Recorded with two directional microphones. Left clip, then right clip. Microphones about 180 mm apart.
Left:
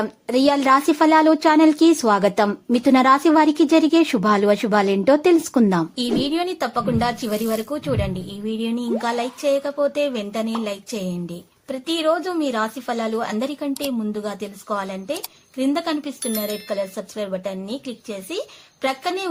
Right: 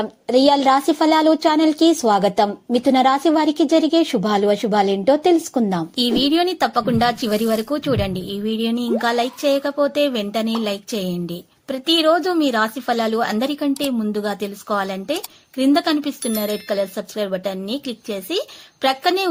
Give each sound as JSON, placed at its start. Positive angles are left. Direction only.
{"t": 0.0, "sound": "speech", "side_deg": 0}
{"t": 6.0, "sound": "a woman's voice", "side_deg": -25}